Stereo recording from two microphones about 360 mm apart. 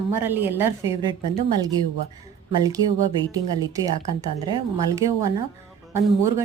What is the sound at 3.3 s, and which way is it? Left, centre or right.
A woman's voice, centre.